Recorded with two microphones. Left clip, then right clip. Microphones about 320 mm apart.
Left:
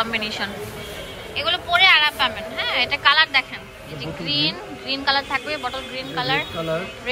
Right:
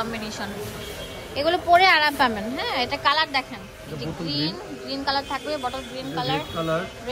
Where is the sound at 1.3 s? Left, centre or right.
Centre.